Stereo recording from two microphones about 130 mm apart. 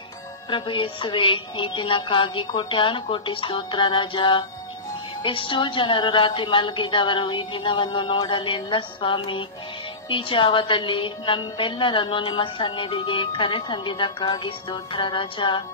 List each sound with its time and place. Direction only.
0.5 s a woman's voice: 40° left (ahead or behind)